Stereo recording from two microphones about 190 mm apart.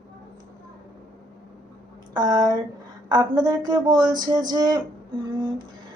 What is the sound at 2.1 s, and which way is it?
A woman's voice, 20° right (ahead or behind).